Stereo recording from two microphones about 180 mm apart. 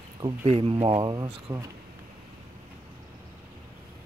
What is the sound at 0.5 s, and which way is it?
Speech, 30° right (ahead or behind).